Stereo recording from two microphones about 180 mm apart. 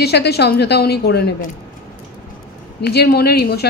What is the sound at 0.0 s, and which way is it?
A woman's voice, 65° left (ahead or behind).